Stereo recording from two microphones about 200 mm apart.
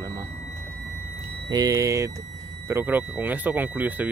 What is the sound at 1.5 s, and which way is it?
Speech, 20° right (ahead or behind).